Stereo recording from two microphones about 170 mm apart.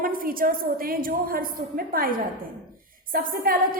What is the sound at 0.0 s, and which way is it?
A woman's voice, 55° right (ahead or behind).